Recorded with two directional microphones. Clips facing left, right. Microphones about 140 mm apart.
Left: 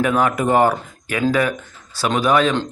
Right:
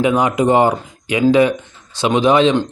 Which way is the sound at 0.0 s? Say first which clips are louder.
Right 3 dB; 20° right (ahead or behind).